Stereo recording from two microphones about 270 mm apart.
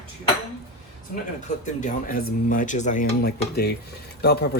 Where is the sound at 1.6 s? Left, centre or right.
Left.